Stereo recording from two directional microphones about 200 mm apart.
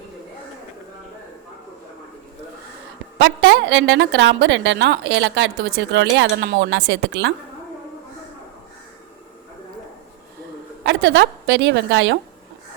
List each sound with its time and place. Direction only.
3.2 s a woman's voice: 65° right (ahead or behind)
10.8 s a woman's voice: 65° right (ahead or behind)